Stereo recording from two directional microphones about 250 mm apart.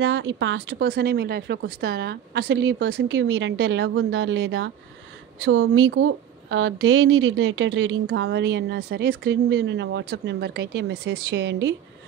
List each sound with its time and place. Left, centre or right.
0.0 s a woman's voice: right